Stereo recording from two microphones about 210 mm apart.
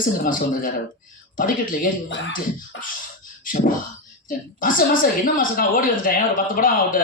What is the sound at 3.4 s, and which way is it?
Beatboxing, 40° left (ahead or behind).